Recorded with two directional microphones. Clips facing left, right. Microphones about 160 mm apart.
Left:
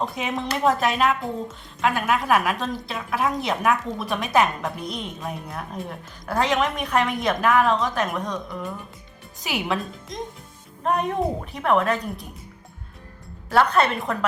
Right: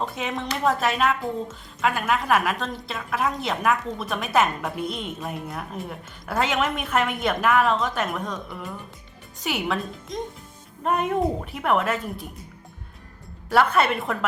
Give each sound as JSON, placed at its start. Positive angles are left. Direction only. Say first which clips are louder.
{"t": 0.0, "sound": "a woman's voice", "louder": "left 2 dB", "side_deg": 0}
{"t": 13.5, "sound": "a woman's voice", "louder": "left 1 dB", "side_deg": -5}